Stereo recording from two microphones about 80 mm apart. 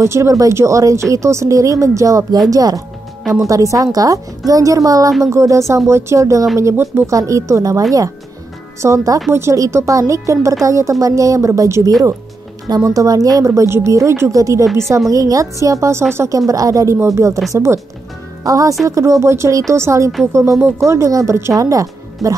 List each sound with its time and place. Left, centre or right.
0.0 s a woman's voice: right
8.8 s a woman's voice: right
18.4 s a woman's voice: right